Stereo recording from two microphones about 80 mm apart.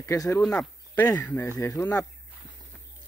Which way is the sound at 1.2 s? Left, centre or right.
Centre.